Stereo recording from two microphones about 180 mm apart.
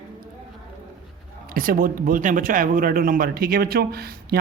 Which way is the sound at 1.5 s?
50° right (ahead or behind).